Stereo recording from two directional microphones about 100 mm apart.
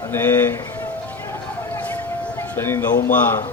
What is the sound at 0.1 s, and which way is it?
Speech, 20° left (ahead or behind).